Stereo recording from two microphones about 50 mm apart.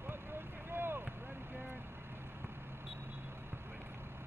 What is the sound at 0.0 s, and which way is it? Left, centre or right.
Vehicle, right.